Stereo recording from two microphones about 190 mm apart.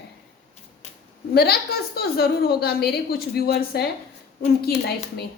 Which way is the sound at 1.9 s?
55° left (ahead or behind).